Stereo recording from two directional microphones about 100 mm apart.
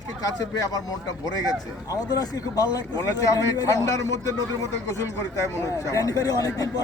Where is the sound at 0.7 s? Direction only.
40° left (ahead or behind).